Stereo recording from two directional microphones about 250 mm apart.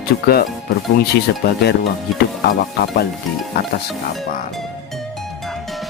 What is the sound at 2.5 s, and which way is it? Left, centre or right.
Speech, left.